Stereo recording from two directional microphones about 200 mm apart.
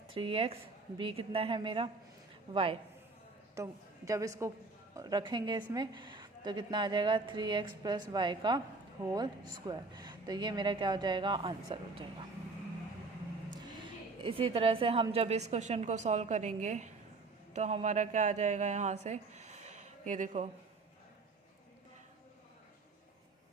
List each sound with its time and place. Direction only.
0.1 s a woman's voice: 25° right (ahead or behind)
3.5 s a woman's voice: 15° right (ahead or behind)
13.8 s a woman's voice: 25° right (ahead or behind)